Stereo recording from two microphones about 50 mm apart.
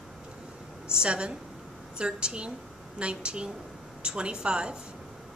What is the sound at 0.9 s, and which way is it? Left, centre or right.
A woman's voice, centre.